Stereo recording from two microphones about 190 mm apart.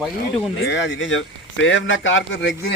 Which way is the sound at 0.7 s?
75° left (ahead or behind).